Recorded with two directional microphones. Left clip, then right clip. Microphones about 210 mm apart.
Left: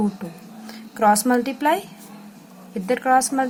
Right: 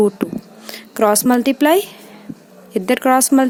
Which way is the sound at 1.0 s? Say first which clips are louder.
Right 3 dB; 50° right (ahead or behind).